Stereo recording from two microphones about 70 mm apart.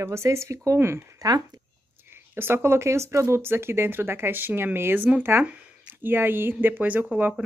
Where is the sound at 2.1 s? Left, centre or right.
Right.